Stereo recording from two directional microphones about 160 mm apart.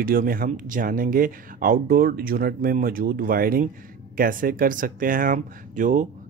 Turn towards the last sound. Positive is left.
turn(degrees=-55)  # may be behind; listen again after turning